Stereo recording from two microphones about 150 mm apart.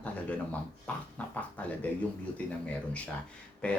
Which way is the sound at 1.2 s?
10° left (ahead or behind).